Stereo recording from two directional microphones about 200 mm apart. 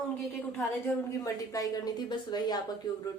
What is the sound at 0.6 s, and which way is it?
A woman's voice, 15° left (ahead or behind).